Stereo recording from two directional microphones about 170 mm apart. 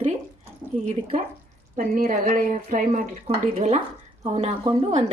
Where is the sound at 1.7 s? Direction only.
55° right (ahead or behind).